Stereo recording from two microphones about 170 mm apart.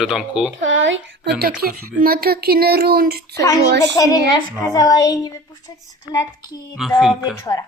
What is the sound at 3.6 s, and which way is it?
Speech, 80° right.